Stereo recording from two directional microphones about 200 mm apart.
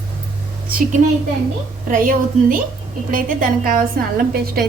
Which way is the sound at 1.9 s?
45° right (ahead or behind).